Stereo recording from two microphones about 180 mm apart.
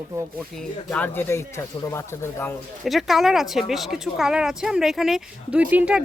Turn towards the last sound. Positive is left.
turn(degrees=-5)  # may be behind; listen again after turning